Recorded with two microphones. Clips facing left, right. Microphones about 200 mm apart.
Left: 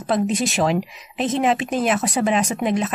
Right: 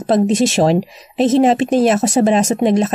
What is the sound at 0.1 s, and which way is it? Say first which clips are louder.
Speech: right 7 dB; 40° right (ahead or behind).